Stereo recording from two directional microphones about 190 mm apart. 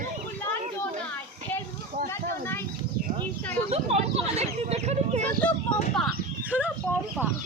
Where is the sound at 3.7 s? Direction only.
35° right (ahead or behind).